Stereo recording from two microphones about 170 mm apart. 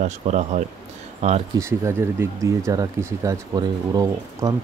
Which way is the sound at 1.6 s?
15° right (ahead or behind).